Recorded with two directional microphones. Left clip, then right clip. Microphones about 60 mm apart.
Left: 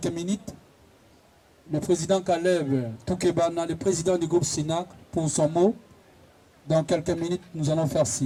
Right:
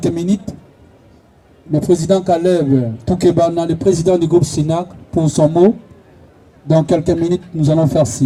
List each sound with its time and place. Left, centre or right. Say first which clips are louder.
0.0 s a man's voice: right 12 dB; centre
1.7 s a man's voice: right 10 dB; centre
6.7 s a man's voice: right 10 dB; centre